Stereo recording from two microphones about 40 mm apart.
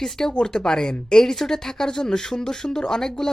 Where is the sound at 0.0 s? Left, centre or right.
Centre.